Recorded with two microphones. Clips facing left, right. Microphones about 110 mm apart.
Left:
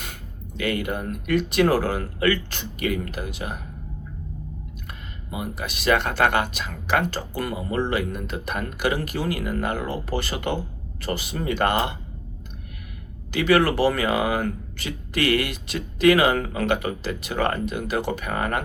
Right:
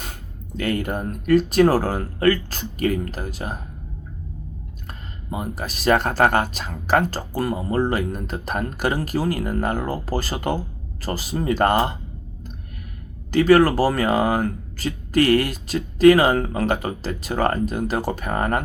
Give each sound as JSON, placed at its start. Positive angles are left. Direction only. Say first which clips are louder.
{"t": 0.0, "sound": "speech", "louder": "right 1 dB", "side_deg": -35}
{"t": 4.9, "sound": "speech", "louder": "right 5 dB", "side_deg": -40}
{"t": 13.3, "sound": "speech", "louder": "right 5 dB", "side_deg": -40}